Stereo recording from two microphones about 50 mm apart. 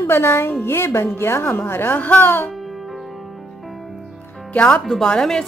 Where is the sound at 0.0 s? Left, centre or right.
Left.